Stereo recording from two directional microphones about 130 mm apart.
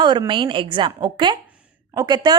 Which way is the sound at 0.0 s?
35° right (ahead or behind).